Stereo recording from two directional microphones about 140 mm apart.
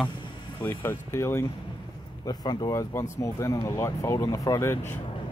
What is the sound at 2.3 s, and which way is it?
Speech, 30° left (ahead or behind).